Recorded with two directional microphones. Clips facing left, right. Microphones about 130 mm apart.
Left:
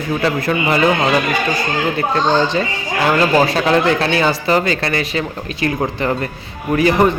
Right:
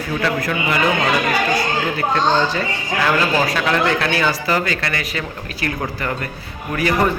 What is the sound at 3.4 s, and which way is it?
Speech, 25° left (ahead or behind).